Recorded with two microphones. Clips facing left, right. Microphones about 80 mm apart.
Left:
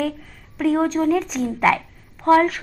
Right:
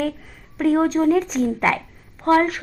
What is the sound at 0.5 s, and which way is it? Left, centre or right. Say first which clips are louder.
Speech: right 1 dB; centre.